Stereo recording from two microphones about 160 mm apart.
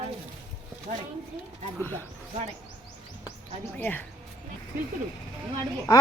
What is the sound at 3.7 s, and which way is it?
Speech, 10° left (ahead or behind).